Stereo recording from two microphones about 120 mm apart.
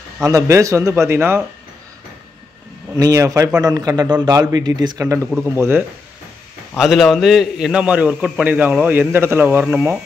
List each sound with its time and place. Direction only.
0.2 s a man's voice: 25° right (ahead or behind)
3.0 s a man's voice: 30° right (ahead or behind)
6.8 s a man's voice: centre (ahead or behind); by 9.9 s 20° right (ahead or behind)